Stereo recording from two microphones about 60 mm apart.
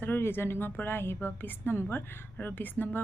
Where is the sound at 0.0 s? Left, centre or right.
Left.